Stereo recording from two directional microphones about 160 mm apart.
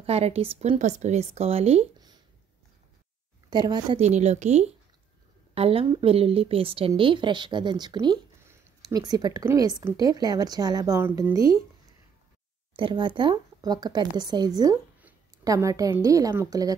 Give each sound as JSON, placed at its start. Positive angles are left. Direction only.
{"t": 0.0, "sound": "speech", "side_deg": -40}
{"t": 3.4, "sound": "a woman's voice", "side_deg": -25}
{"t": 4.0, "sound": "a woman's voice", "side_deg": -45}
{"t": 12.7, "sound": "a woman's voice", "side_deg": -30}